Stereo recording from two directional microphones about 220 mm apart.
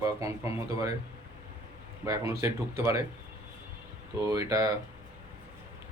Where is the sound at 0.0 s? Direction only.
15° right (ahead or behind).